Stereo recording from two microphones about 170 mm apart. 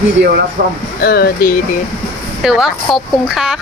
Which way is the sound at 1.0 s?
65° left (ahead or behind).